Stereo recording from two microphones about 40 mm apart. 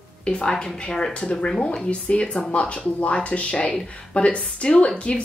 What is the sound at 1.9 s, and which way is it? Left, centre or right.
Speech, left.